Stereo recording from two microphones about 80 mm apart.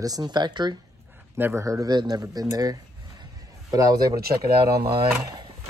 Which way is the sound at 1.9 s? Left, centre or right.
Right.